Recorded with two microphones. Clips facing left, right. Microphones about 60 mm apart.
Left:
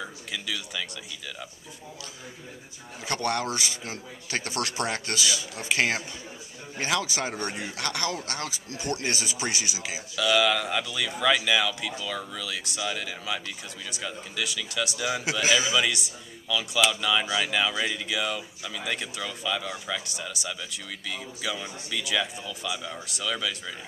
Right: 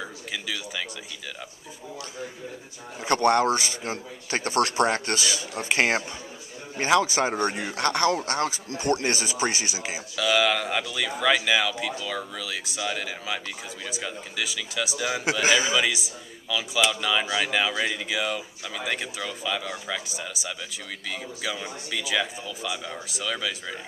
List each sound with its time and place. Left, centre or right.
0.0 s speech: centre
3.0 s speech: right
10.1 s a man's voice: centre
15.4 s speech: right
15.7 s a man's voice: centre